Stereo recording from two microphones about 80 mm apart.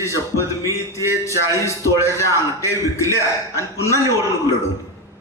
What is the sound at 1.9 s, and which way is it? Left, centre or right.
Music, right.